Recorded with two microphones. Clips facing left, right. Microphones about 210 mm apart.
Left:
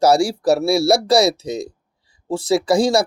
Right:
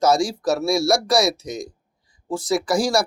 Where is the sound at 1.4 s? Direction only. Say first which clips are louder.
Left 5 dB; 65° left (ahead or behind).